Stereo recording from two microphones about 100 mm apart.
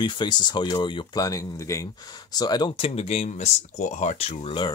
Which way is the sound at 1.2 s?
35° left (ahead or behind).